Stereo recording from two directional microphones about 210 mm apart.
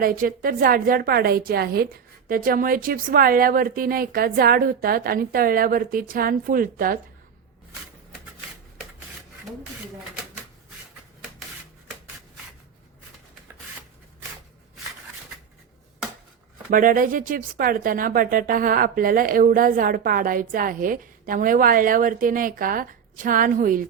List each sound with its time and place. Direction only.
0.0 s a woman's voice: 45° right (ahead or behind)
16.6 s speech: 40° right (ahead or behind)